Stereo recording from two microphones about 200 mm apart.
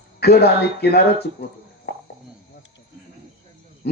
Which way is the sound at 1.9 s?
55° left (ahead or behind).